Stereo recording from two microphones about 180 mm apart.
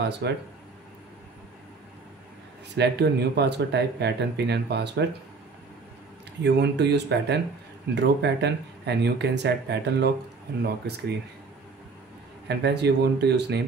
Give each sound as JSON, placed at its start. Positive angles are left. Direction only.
{"t": 0.2, "sound": "speech", "side_deg": -70}
{"t": 2.7, "sound": "speech", "side_deg": -65}
{"t": 6.4, "sound": "speech", "side_deg": -70}
{"t": 12.4, "sound": "speech", "side_deg": -65}